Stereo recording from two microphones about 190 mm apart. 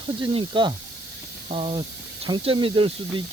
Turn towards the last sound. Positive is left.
turn(degrees=-25)  # may be behind; listen again after turning